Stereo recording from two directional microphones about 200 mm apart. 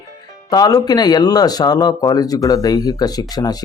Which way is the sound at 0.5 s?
20° left (ahead or behind).